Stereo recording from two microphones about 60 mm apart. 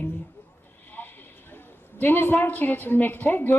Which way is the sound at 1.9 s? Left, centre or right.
Left.